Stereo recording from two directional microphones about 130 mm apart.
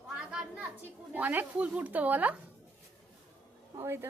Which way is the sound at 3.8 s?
20° right (ahead or behind).